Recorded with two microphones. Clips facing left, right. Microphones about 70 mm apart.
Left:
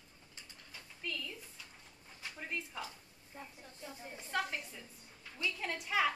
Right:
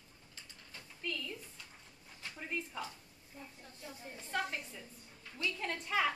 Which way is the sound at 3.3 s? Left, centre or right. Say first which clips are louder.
Left 2 dB; left.